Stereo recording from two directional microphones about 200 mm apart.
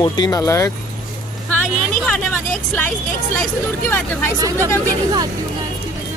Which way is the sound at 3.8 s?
10° left (ahead or behind).